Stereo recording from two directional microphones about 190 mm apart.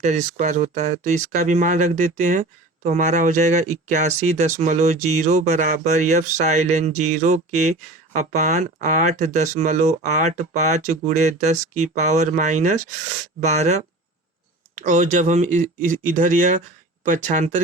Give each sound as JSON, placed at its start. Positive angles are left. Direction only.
{"t": 0.0, "sound": "speech", "side_deg": -40}